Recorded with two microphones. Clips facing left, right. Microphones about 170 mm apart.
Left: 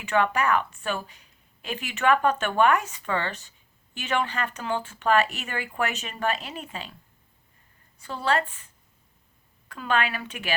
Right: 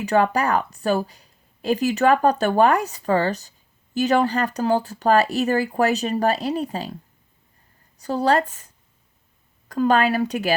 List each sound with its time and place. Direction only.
0.0 s a woman's voice: 35° right (ahead or behind)